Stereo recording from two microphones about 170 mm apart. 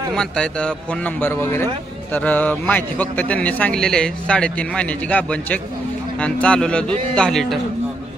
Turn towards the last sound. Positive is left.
turn(degrees=5)  # may be behind; listen again after turning